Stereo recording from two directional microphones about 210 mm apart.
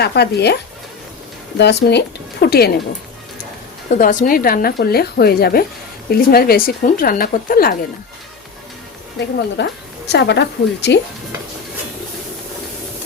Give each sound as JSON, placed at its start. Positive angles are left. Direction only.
{"t": 0.0, "sound": "speech", "side_deg": 50}
{"t": 3.9, "sound": "speech", "side_deg": 40}
{"t": 9.1, "sound": "a woman's voice", "side_deg": 55}